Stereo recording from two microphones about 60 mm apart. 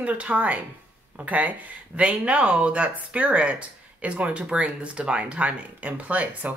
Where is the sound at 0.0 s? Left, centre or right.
Right.